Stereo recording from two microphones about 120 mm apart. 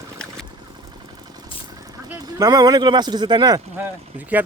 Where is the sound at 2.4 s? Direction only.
35° right (ahead or behind).